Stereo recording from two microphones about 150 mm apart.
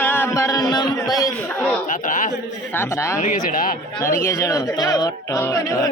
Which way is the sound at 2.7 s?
15° left (ahead or behind).